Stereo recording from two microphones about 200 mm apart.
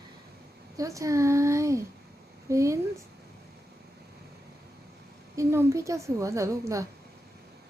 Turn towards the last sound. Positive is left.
turn(degrees=-15)  # may be behind; listen again after turning